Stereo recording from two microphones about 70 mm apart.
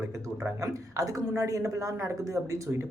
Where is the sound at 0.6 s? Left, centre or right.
Right.